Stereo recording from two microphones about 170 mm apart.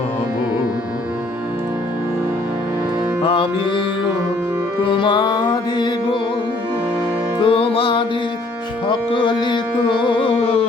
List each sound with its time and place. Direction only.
4.8 s music: 30° left (ahead or behind)
7.4 s music: 35° left (ahead or behind)